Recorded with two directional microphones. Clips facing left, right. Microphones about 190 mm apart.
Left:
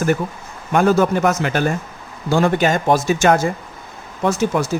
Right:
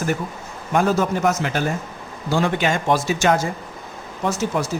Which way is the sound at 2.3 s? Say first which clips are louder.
Left 4 dB; 45° left (ahead or behind).